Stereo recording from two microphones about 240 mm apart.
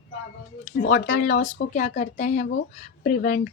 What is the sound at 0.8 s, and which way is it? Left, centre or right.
A woman's voice, left.